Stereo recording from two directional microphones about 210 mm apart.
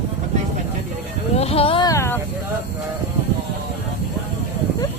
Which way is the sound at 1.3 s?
30° left (ahead or behind).